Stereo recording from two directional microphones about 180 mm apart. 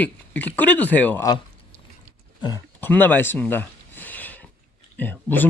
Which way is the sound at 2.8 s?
10° left (ahead or behind).